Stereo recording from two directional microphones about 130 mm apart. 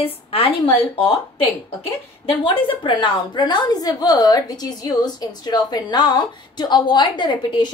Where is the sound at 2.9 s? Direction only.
35° left (ahead or behind).